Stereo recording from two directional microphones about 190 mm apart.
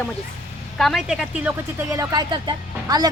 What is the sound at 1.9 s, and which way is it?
Speech, 20° right (ahead or behind).